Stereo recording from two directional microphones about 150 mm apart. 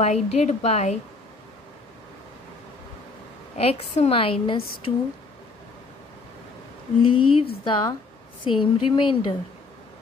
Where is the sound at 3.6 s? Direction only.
40° left (ahead or behind).